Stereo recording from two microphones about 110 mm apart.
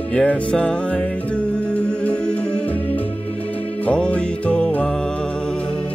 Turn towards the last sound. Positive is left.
turn(degrees=5)  # may be behind; listen again after turning